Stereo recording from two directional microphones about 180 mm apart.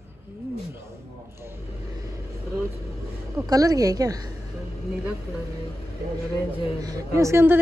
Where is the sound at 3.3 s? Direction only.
20° right (ahead or behind).